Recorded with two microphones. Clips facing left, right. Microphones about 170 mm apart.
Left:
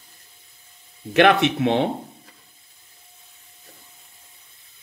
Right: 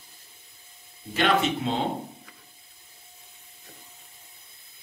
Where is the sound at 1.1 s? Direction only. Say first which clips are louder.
Left 7 dB; 70° left (ahead or behind).